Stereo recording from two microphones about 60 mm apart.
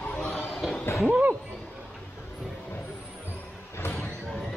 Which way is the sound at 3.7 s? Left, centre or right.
Left.